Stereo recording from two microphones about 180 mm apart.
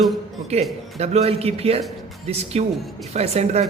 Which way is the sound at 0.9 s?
35° right (ahead or behind).